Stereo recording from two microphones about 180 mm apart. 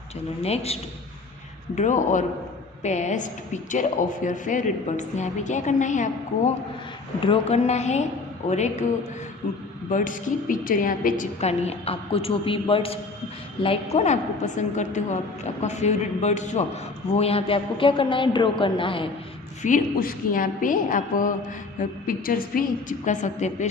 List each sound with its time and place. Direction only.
0.4 s a woman's voice: 35° left (ahead or behind)
7.2 s a woman's voice: 30° left (ahead or behind)
9.9 s speech: 45° left (ahead or behind)
11.3 s a woman's voice: 35° left (ahead or behind)
19.6 s speech: 50° left (ahead or behind)